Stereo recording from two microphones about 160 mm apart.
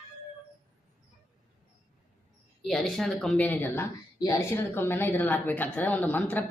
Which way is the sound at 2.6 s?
Centre (ahead or behind).